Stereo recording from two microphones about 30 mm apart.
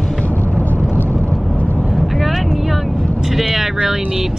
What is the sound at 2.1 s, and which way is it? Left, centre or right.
Vehicle, centre.